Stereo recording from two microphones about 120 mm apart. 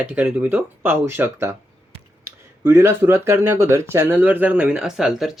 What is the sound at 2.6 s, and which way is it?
Speech, 20° right (ahead or behind).